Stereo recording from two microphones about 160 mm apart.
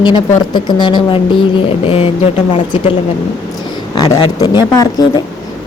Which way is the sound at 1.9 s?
35° left (ahead or behind).